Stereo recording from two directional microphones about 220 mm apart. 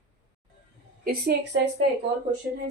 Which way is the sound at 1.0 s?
45° right (ahead or behind).